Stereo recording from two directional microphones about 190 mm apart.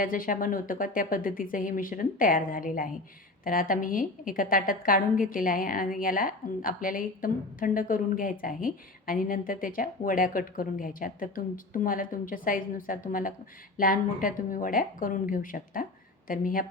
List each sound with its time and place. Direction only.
0.0 s a woman's voice: 45° left (ahead or behind)